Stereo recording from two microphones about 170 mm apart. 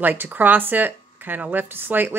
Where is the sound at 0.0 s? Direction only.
10° right (ahead or behind).